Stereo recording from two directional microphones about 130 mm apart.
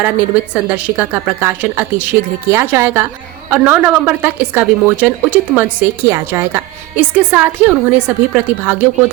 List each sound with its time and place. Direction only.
0.0 s a woman's voice: 10° right (ahead or behind)